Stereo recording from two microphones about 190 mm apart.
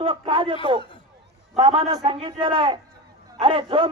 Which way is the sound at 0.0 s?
25° right (ahead or behind).